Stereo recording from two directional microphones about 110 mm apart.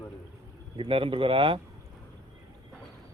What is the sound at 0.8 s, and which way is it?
Speech, 55° right (ahead or behind).